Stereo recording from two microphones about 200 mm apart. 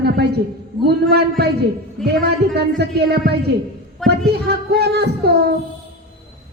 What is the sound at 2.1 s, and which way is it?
Speech, 55° right (ahead or behind).